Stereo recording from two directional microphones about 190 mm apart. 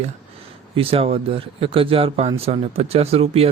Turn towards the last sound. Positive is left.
turn(degrees=-30)  # may be behind; listen again after turning